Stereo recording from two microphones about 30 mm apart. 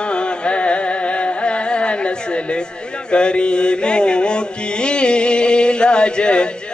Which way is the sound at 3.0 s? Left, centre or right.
Left.